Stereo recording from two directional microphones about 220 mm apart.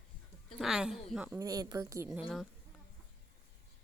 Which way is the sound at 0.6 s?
Centre (ahead or behind).